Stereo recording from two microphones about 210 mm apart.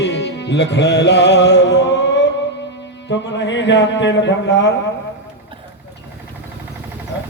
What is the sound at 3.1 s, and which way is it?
Speech, 60° left (ahead or behind).